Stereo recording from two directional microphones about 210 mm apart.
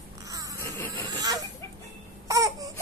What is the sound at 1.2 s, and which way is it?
Chicken, 15° right (ahead or behind).